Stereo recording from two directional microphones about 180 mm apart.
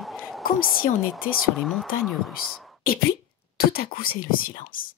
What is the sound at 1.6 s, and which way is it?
A woman's voice, centre (ahead or behind).